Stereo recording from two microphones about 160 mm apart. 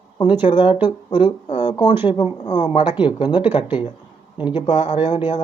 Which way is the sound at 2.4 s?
25° left (ahead or behind).